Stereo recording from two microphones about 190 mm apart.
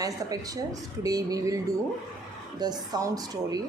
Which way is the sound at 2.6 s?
20° right (ahead or behind).